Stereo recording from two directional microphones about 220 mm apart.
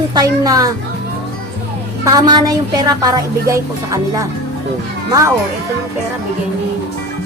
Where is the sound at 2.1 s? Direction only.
20° right (ahead or behind).